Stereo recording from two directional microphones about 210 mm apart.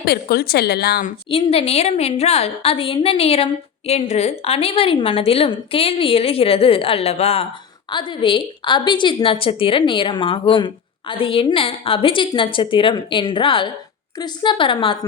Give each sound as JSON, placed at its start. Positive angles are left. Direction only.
{"t": 0.0, "sound": "a woman's voice", "side_deg": 50}
{"t": 1.3, "sound": "a woman's voice", "side_deg": 25}